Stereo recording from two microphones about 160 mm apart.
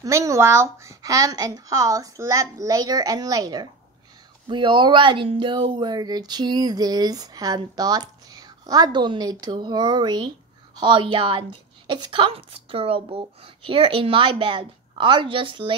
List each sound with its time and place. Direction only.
0.0 s a woman's voice: 20° right (ahead or behind)